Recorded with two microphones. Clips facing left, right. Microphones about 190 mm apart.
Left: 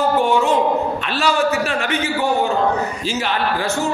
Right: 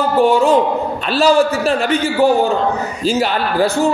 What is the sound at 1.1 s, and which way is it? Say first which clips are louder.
Speech: right 6 dB; 35° right (ahead or behind).